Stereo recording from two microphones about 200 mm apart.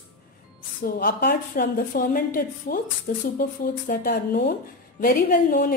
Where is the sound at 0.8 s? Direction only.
45° left (ahead or behind).